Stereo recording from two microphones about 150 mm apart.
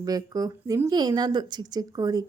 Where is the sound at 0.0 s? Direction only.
25° right (ahead or behind).